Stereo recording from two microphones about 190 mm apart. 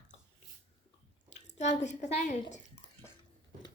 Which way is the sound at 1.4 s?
40° left (ahead or behind).